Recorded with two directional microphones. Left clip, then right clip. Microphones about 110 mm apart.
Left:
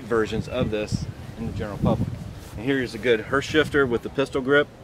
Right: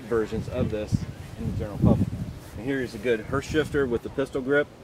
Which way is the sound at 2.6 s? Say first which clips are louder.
Left 4 dB; 20° left (ahead or behind).